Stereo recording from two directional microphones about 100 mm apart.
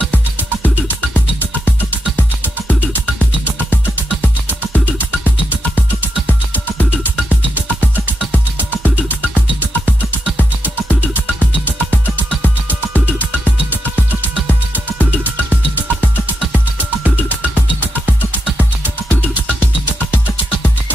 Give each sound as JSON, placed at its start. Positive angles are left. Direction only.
{"t": 0.8, "sound": "music", "side_deg": 20}
{"t": 2.7, "sound": "music", "side_deg": 15}
{"t": 5.5, "sound": "music", "side_deg": 15}
{"t": 8.8, "sound": "music", "side_deg": 15}
{"t": 10.2, "sound": "music", "side_deg": -20}
{"t": 11.0, "sound": "music", "side_deg": 20}
{"t": 15.0, "sound": "music", "side_deg": 15}
{"t": 18.0, "sound": "music", "side_deg": -20}